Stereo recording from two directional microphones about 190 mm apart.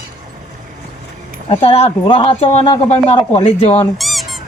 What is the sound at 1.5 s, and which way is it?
Speech, 30° left (ahead or behind).